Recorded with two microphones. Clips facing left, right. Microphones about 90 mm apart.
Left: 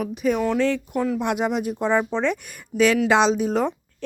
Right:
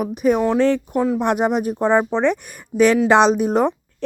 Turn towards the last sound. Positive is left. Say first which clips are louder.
# right 4 dB
turn(degrees=-55)  # may be behind; listen again after turning